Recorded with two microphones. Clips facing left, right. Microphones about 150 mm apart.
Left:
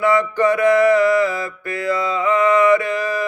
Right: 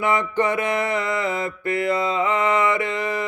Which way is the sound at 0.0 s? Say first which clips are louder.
Left 5 dB; 20° right (ahead or behind).